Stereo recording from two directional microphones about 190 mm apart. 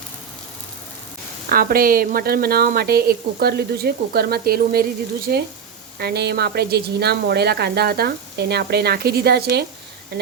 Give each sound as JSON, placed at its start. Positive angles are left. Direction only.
{"t": 1.5, "sound": "a woman's voice", "side_deg": -50}